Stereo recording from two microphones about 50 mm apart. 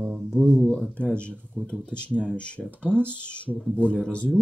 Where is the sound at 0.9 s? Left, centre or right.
Left.